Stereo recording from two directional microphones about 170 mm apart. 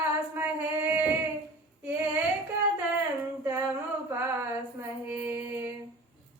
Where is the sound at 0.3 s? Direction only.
10° right (ahead or behind).